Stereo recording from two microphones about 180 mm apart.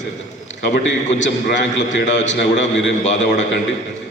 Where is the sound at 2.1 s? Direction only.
40° left (ahead or behind).